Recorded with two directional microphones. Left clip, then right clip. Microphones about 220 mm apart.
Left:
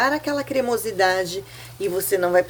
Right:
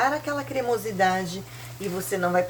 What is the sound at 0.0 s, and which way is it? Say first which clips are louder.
Speech: left 3 dB; 40° left (ahead or behind).